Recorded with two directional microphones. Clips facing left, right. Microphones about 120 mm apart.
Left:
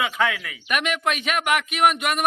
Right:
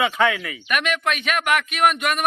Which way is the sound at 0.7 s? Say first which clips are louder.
Right 1 dB; 20° left (ahead or behind).